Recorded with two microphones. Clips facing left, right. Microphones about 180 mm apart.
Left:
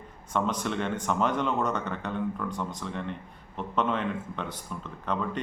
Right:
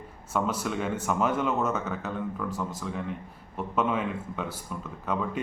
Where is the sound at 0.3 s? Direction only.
5° right (ahead or behind).